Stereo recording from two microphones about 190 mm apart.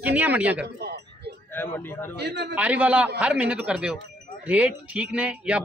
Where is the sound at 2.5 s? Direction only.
5° right (ahead or behind).